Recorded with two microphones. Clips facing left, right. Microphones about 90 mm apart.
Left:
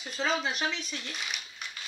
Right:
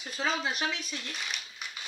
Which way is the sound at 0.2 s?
Centre (ahead or behind).